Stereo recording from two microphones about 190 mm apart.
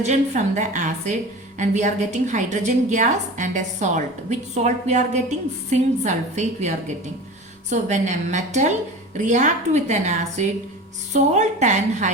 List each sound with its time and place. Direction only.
0.0 s a woman's voice: 40° right (ahead or behind)